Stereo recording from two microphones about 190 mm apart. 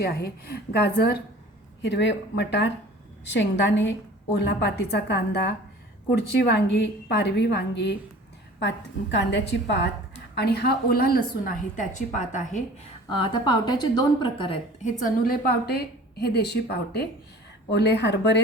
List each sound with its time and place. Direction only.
0.0 s a woman's voice: 55° left (ahead or behind)
1.8 s a woman's voice: 65° left (ahead or behind); by 12.6 s 40° left (ahead or behind)
13.1 s a woman's voice: 25° left (ahead or behind); by 18.3 s 65° left (ahead or behind)